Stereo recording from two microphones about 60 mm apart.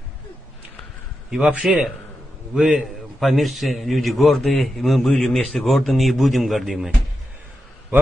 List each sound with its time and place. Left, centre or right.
1.3 s a man's voice: centre
3.2 s a man's voice: centre